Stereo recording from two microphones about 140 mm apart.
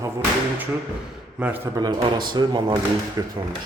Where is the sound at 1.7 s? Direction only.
25° right (ahead or behind).